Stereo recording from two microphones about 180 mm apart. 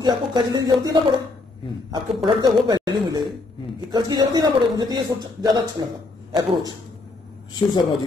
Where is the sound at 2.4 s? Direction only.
20° right (ahead or behind).